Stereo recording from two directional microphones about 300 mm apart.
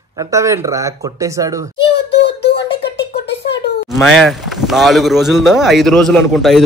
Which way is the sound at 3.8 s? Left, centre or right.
Centre.